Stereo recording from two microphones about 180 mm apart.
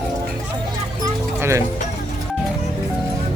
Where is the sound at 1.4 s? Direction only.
15° right (ahead or behind).